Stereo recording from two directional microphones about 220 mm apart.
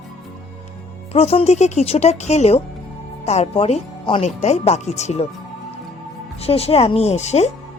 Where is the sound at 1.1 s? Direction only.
30° left (ahead or behind).